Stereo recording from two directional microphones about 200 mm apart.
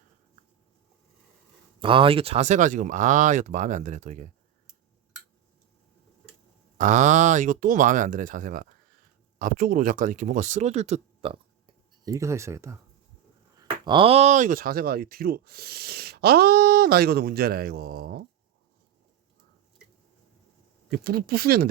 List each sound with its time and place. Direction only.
1.8 s speech: 25° right (ahead or behind)
6.7 s speech: 40° right (ahead or behind)
20.9 s speech: 50° right (ahead or behind)